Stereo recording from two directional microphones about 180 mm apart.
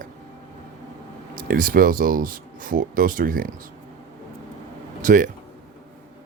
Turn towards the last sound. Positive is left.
turn(degrees=-50)  # may be behind; listen again after turning